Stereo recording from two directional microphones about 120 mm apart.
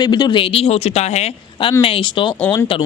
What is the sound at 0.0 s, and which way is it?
Speech, 35° left (ahead or behind).